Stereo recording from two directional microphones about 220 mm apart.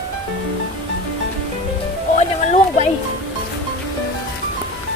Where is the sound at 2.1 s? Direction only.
35° left (ahead or behind).